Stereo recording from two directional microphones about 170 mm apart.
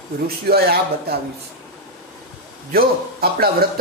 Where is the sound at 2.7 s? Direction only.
60° right (ahead or behind).